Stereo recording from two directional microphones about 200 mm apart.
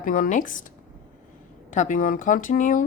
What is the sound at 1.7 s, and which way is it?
A woman's voice, 40° left (ahead or behind).